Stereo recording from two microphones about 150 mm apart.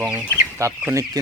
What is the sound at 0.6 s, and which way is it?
Speech, 20° right (ahead or behind).